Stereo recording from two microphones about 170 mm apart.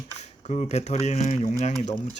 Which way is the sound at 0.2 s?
40° left (ahead or behind).